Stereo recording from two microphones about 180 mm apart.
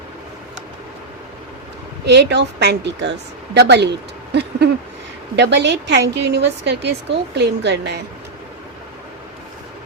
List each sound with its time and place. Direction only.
2.0 s a woman's voice: 70° right (ahead or behind)